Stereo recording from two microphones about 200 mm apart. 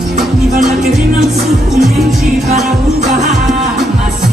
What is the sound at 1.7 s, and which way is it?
Music, centre (ahead or behind).